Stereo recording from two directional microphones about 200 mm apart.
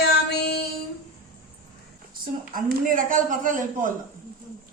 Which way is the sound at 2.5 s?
40° right (ahead or behind).